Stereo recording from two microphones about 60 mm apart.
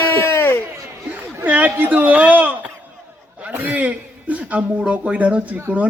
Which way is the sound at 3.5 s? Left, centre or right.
Right.